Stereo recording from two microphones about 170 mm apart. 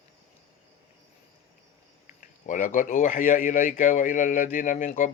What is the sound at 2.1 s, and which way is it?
Speech, 50° left (ahead or behind).